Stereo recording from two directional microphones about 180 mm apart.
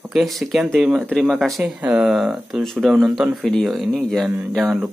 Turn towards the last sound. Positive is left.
turn(degrees=0)  # may be behind; listen again after turning